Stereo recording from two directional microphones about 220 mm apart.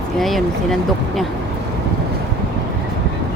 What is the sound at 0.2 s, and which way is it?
Speech, centre (ahead or behind).